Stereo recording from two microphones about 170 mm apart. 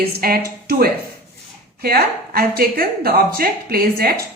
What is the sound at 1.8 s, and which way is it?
A woman's voice, 60° right (ahead or behind).